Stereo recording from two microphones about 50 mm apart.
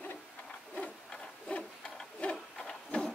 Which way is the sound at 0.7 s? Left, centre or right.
Left.